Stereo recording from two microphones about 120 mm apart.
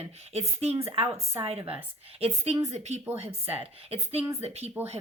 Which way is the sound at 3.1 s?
55° right (ahead or behind).